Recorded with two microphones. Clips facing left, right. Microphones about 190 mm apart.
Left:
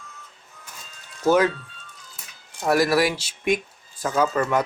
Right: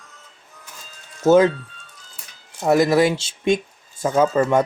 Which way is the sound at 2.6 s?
20° right (ahead or behind).